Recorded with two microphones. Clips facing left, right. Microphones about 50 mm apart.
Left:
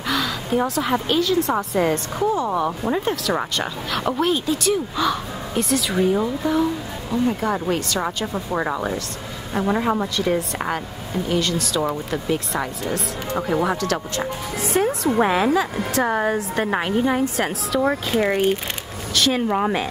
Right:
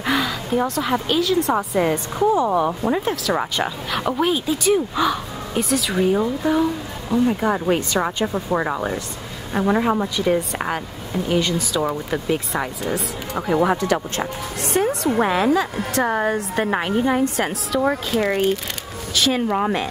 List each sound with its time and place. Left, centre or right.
0.0 s a sound: centre
0.5 s speech: centre
14.2 s speech: centre
19.1 s speech: centre